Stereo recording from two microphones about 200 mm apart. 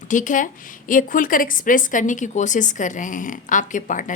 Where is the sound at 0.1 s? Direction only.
40° left (ahead or behind).